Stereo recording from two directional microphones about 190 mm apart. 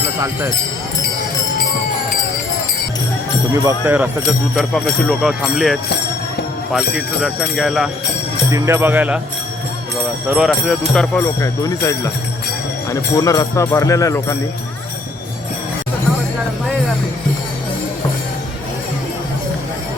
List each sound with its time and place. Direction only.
3.5 s speech: 15° right (ahead or behind)
4.5 s speech: centre (ahead or behind)
8.4 s speech: 15° right (ahead or behind)
10.2 s speech: 5° right (ahead or behind)
11.3 s speech: 15° left (ahead or behind)